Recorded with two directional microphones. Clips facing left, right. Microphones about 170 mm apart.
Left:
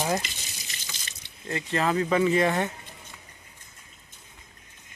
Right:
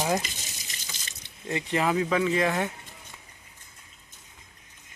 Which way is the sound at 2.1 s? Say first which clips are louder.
Left 2 dB; centre (ahead or behind).